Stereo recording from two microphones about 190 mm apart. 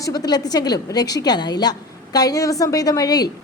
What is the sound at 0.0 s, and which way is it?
A woman's voice, 20° left (ahead or behind).